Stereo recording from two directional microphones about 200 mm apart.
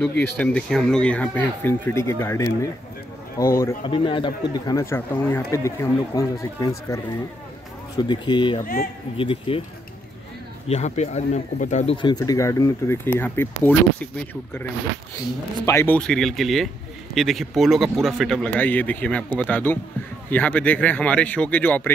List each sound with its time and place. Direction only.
0.4 s speech: 5° left (ahead or behind)
3.8 s speech: 25° left (ahead or behind)
8.0 s speech: 20° left (ahead or behind)
10.7 s speech: 35° left (ahead or behind); by 21.9 s 10° left (ahead or behind)